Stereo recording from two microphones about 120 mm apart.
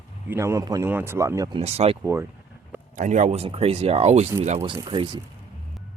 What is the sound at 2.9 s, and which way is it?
Speech, 90° right.